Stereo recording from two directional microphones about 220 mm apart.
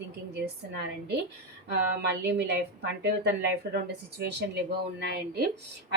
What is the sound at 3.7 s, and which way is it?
Speech, 50° right (ahead or behind).